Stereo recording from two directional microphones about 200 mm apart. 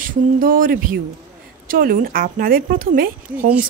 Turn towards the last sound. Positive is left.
turn(degrees=-45)  # may be behind; listen again after turning